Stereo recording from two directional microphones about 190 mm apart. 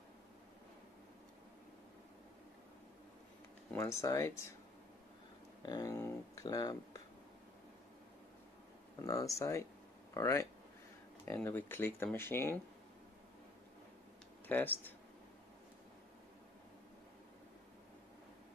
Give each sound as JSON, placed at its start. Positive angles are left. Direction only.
{"t": 3.7, "sound": "speech", "side_deg": 15}
{"t": 5.6, "sound": "speech", "side_deg": 20}
{"t": 9.0, "sound": "speech", "side_deg": 15}
{"t": 14.5, "sound": "speech", "side_deg": 10}